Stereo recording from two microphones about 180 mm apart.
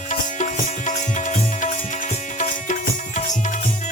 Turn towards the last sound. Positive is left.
turn(degrees=45)  # may be behind; listen again after turning